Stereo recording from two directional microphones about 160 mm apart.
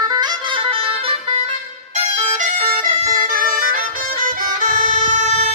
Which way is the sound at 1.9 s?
50° right (ahead or behind).